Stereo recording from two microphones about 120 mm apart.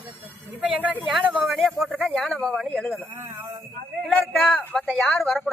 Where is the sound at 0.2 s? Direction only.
15° right (ahead or behind).